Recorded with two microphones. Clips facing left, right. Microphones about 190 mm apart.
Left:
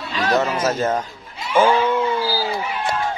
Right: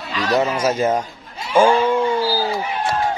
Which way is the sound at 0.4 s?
10° right (ahead or behind).